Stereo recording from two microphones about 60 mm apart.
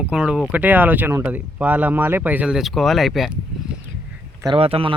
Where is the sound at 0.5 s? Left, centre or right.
Right.